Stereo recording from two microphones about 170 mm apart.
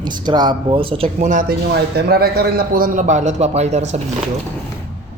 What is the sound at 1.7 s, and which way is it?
A man's voice, 70° right (ahead or behind).